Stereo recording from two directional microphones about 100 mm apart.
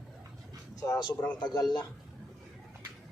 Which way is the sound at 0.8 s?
45° left (ahead or behind).